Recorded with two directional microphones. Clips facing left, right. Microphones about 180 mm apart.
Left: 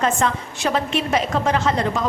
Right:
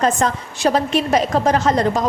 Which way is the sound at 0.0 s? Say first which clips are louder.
Right 2 dB; 40° right (ahead or behind).